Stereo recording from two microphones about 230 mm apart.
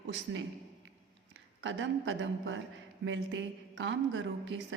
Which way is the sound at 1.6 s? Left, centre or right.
Right.